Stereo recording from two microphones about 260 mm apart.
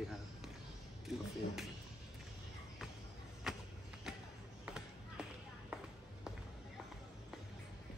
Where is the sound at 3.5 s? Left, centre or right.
Centre.